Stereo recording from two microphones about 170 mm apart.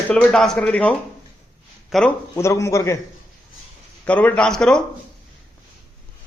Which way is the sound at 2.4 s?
15° left (ahead or behind).